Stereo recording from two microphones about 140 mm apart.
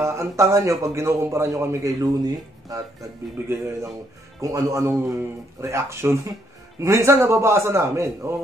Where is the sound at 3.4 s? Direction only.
20° right (ahead or behind).